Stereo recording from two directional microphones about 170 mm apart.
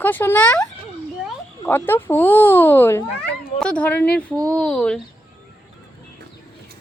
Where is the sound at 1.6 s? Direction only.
10° left (ahead or behind).